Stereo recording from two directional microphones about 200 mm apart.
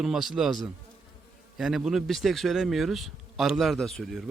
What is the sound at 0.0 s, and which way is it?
Speech, centre (ahead or behind).